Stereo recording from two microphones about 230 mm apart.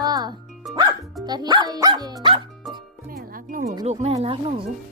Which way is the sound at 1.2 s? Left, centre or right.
Centre.